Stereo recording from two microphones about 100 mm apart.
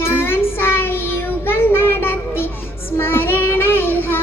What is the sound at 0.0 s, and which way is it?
Child singing, 25° left (ahead or behind).